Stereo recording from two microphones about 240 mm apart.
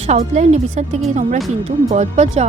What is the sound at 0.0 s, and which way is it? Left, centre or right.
Speech, right.